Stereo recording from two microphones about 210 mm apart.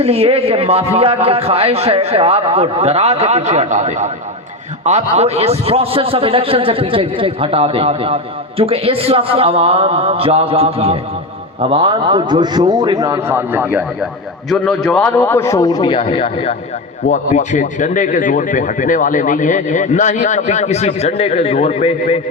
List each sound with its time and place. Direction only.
0.0 s a man's voice: 30° right (ahead or behind); by 13.8 s 10° right (ahead or behind)
14.6 s a man's voice: 5° left (ahead or behind); by 22.2 s 30° left (ahead or behind)